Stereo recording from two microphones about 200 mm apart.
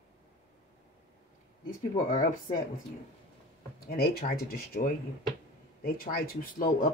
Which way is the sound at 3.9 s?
50° left (ahead or behind).